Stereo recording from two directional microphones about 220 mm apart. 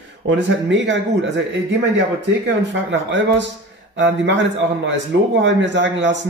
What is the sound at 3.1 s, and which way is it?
A man's voice, 55° right (ahead or behind).